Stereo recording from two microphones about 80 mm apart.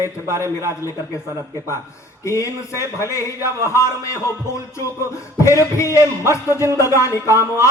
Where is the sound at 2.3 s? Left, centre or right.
Left.